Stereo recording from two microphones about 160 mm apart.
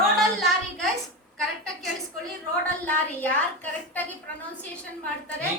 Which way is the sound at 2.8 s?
10° left (ahead or behind).